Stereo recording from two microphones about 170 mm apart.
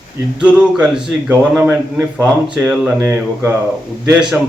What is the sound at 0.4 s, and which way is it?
A man's voice, 5° right (ahead or behind).